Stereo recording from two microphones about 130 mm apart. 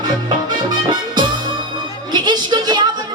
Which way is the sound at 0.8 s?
35° right (ahead or behind).